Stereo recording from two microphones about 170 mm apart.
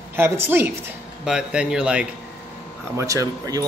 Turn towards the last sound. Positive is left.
turn(degrees=-20)  # may be behind; listen again after turning